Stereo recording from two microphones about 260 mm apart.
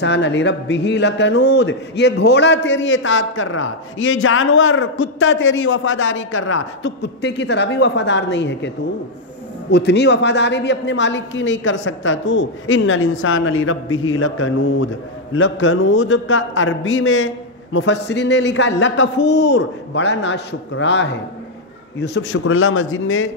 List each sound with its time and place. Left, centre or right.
0.0 s a man's voice: left